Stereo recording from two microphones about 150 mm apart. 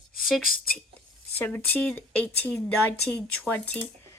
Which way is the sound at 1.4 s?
10° left (ahead or behind).